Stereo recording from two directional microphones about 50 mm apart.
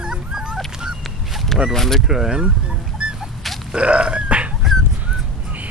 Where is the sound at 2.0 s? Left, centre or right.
Centre.